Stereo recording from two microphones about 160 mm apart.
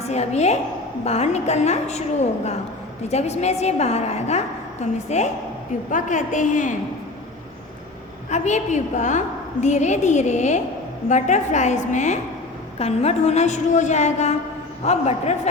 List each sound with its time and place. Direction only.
0.0 s a woman's voice: 40° left (ahead or behind)
8.3 s a woman's voice: 50° left (ahead or behind)